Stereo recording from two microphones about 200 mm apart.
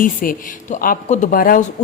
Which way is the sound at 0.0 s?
45° left (ahead or behind).